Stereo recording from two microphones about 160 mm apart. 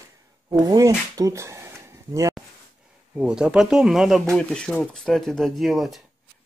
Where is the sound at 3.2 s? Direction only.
5° right (ahead or behind).